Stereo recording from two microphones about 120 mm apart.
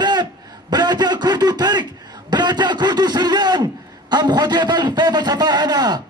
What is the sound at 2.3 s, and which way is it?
Speech, 40° right (ahead or behind).